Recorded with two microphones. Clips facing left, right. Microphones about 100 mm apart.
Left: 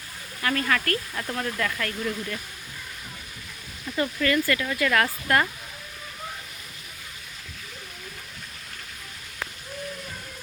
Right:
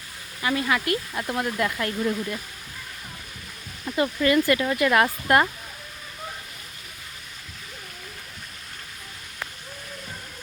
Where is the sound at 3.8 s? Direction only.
25° right (ahead or behind).